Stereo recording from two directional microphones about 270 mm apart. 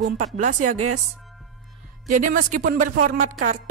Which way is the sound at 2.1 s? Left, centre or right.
Right.